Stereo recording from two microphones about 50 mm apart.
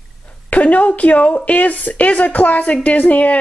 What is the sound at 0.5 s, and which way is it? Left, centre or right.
A woman's voice, left.